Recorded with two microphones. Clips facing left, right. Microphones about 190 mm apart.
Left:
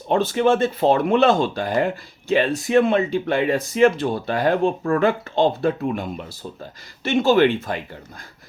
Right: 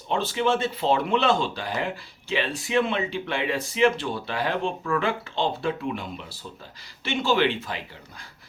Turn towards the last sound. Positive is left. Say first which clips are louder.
# left 7 dB
turn(degrees=50)  # may be behind; listen again after turning